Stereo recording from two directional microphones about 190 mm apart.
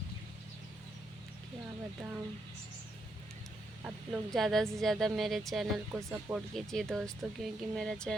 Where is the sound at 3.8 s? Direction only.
Centre (ahead or behind).